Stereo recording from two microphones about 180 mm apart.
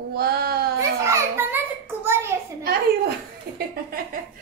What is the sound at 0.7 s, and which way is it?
Children playing, 15° right (ahead or behind).